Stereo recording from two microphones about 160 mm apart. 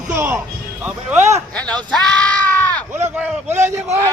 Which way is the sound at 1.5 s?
5° left (ahead or behind).